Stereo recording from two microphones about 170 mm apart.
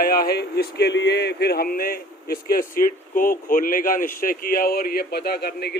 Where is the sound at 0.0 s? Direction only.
60° left (ahead or behind).